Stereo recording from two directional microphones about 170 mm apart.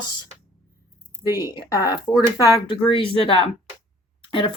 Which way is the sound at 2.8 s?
30° left (ahead or behind).